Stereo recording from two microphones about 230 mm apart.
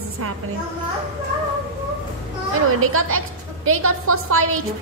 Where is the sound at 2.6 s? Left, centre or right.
Right.